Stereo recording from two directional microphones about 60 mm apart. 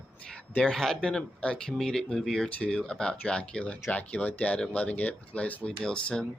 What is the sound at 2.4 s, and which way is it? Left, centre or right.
Speech, left.